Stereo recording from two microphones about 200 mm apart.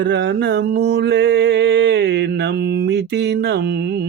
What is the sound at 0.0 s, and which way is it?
Mantra, 65° right (ahead or behind).